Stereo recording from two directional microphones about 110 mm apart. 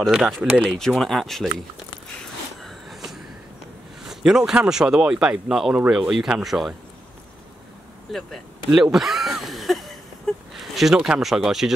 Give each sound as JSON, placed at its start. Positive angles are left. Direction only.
{"t": 0.0, "sound": "speech", "side_deg": 0}
{"t": 0.4, "sound": "speech", "side_deg": -15}
{"t": 0.7, "sound": "speech", "side_deg": 5}
{"t": 2.6, "sound": "a sound", "side_deg": 0}
{"t": 4.0, "sound": "speech", "side_deg": -5}
{"t": 8.1, "sound": "a sound", "side_deg": 0}
{"t": 10.6, "sound": "speech", "side_deg": 0}